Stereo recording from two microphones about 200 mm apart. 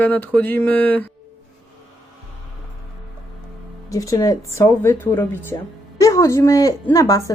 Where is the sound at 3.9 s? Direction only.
15° left (ahead or behind).